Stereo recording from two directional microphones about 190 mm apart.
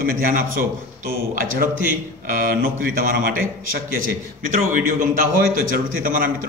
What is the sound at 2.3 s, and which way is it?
A man's voice, 45° right (ahead or behind).